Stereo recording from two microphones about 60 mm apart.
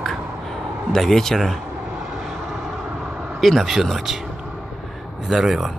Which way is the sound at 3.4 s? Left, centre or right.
Centre.